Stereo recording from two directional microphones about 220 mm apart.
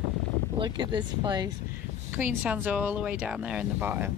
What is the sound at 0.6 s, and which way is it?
Speech, 20° right (ahead or behind).